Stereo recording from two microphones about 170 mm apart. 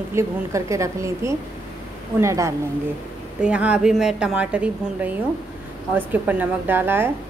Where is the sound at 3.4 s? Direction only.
5° right (ahead or behind).